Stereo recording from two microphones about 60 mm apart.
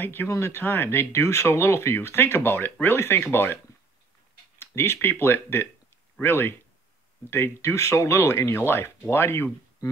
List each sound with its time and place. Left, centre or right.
0.0 s speech: left
4.6 s speech: left